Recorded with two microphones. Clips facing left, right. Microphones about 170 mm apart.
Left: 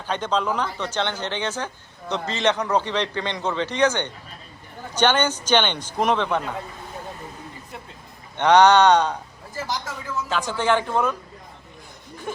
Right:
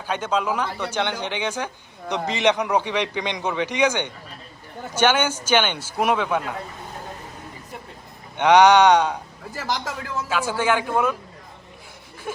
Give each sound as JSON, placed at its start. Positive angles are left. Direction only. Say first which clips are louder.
{"t": 0.0, "sound": "speech", "louder": "even", "side_deg": -10}
{"t": 8.4, "sound": "speech", "louder": "right 1 dB", "side_deg": -10}
{"t": 9.6, "sound": "speech", "louder": "right 4 dB", "side_deg": -90}
{"t": 10.2, "sound": "speech", "louder": "even", "side_deg": -10}